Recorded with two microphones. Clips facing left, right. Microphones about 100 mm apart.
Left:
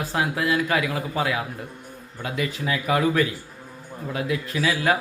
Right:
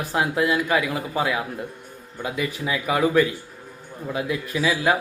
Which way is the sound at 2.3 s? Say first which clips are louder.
Even; 10° right (ahead or behind).